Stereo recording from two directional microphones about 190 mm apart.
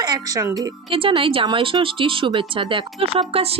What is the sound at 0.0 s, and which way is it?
A woman's voice, 20° right (ahead or behind).